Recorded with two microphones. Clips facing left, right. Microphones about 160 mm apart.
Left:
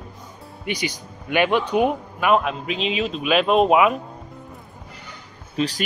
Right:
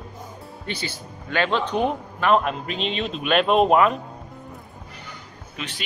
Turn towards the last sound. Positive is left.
turn(degrees=35)  # may be behind; listen again after turning